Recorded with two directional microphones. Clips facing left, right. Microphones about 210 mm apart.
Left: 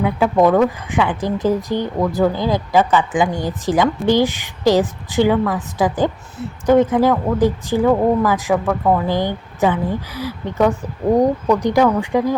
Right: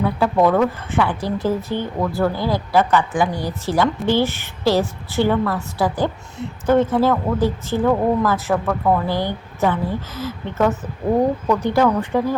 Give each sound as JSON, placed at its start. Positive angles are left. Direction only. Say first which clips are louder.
{"t": 0.0, "sound": "speech", "louder": "left 2 dB", "side_deg": 15}